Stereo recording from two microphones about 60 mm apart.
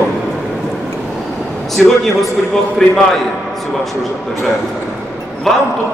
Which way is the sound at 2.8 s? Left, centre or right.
Centre.